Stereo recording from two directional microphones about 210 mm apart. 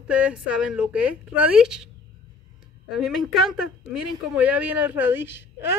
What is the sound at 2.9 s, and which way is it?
Speech, centre (ahead or behind).